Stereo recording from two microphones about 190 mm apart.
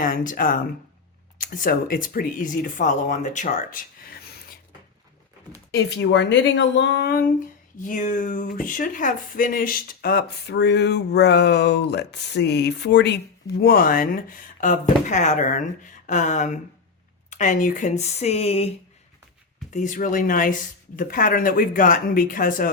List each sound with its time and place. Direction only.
0.0 s speech: 45° left (ahead or behind)
5.7 s speech: 65° left (ahead or behind)
13.6 s speech: 55° left (ahead or behind); by 18.7 s 30° left (ahead or behind)
19.7 s speech: 40° left (ahead or behind)